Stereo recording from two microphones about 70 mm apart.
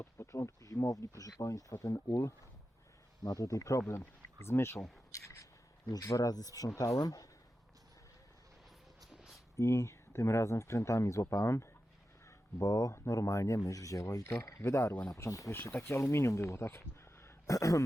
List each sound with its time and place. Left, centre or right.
0.0 s speech: left
3.4 s speech: left
5.8 s speech: left
9.0 s a sound: centre
9.6 s speech: left
15.5 s speech: left